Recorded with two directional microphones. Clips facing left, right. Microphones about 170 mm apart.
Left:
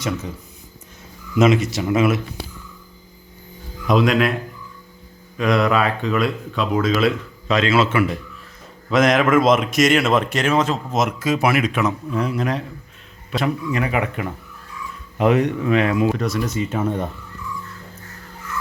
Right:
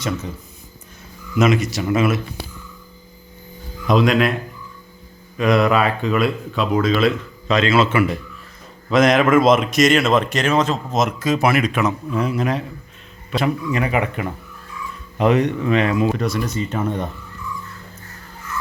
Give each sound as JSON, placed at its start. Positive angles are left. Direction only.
{"t": 1.4, "sound": "speech", "side_deg": 25}
{"t": 3.8, "sound": "speech", "side_deg": 5}
{"t": 5.4, "sound": "speech", "side_deg": 0}